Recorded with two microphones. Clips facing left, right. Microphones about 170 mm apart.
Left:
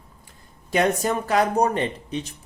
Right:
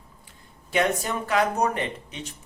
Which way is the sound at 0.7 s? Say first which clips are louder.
Left 3 dB; 40° left (ahead or behind).